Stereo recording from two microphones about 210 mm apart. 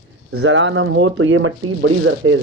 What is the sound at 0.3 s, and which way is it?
Speech, 65° right (ahead or behind).